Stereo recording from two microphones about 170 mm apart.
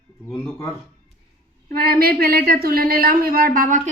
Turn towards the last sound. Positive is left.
turn(degrees=-55)  # may be behind; listen again after turning